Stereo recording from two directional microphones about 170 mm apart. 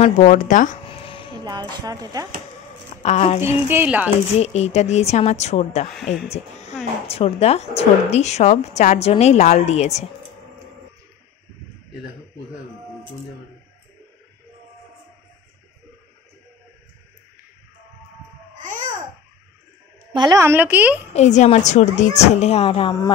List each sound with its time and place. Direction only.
0.0 s speech: 45° left (ahead or behind)
0.8 s a sound: 30° left (ahead or behind)
1.4 s speech: 25° right (ahead or behind)
3.0 s speech: 40° left (ahead or behind)
3.6 s speech: 10° right (ahead or behind)
4.4 s a woman's voice: 40° left (ahead or behind)
6.3 s a sound: 40° left (ahead or behind)
7.1 s a woman's voice: 35° left (ahead or behind)
18.7 s babbling: 50° right (ahead or behind)
20.1 s a woman's voice: 25° right (ahead or behind)
20.4 s speech: 10° right (ahead or behind)
21.1 s a woman's voice: 40° left (ahead or behind)